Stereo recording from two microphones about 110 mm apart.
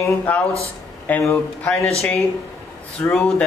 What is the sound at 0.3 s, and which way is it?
Speech, 15° left (ahead or behind).